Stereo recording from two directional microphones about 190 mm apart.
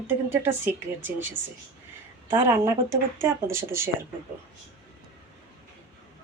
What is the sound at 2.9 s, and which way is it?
Speech, 15° right (ahead or behind).